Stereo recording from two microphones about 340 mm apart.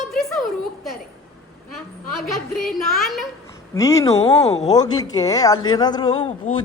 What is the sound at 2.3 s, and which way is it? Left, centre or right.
A woman's voice, centre.